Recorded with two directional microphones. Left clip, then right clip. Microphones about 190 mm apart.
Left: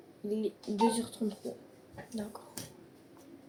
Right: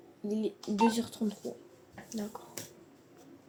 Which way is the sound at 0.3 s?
55° right (ahead or behind).